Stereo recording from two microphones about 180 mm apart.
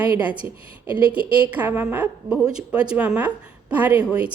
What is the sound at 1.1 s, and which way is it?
A woman's voice, 10° right (ahead or behind).